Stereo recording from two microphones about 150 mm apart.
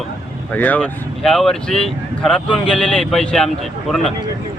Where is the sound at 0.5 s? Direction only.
10° left (ahead or behind).